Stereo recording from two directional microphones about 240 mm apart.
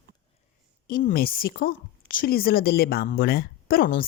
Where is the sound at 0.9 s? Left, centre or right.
Left.